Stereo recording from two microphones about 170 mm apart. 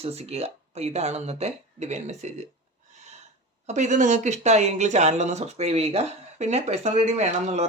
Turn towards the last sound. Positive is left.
turn(degrees=-40)  # may be behind; listen again after turning